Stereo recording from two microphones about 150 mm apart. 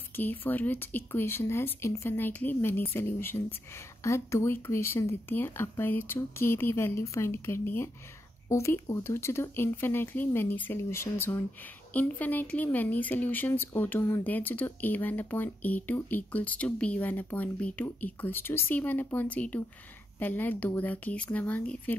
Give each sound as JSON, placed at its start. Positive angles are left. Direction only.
{"t": 0.1, "sound": "speech", "side_deg": 15}